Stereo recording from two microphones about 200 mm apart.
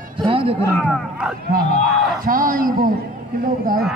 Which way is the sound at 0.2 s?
25° right (ahead or behind).